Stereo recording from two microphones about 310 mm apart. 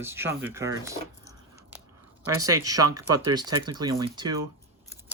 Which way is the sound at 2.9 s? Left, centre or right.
Centre.